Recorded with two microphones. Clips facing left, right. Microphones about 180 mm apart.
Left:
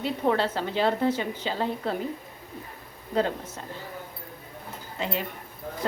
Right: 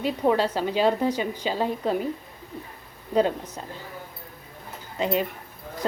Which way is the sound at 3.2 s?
15° right (ahead or behind).